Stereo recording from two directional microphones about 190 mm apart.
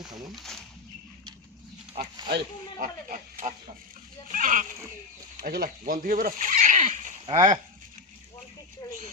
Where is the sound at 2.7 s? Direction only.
45° right (ahead or behind).